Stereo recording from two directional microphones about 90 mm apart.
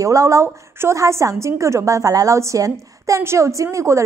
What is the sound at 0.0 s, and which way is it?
A woman's voice, 35° right (ahead or behind).